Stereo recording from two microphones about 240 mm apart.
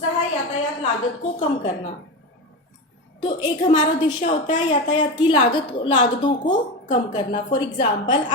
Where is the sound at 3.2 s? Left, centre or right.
Centre.